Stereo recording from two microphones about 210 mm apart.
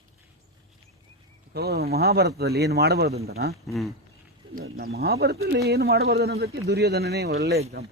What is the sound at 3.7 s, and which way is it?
Speech, centre (ahead or behind).